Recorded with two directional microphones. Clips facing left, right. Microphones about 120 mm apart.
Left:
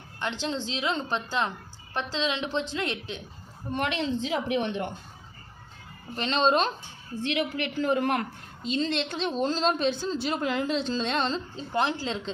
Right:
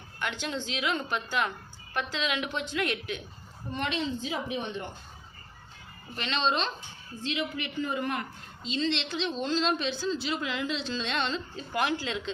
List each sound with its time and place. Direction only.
0.2 s a woman's voice: 30° left (ahead or behind)
4.2 s a woman's voice: 80° left
6.1 s a woman's voice: 40° left (ahead or behind)
7.2 s a woman's voice: 65° left (ahead or behind)
8.6 s a woman's voice: 45° left (ahead or behind)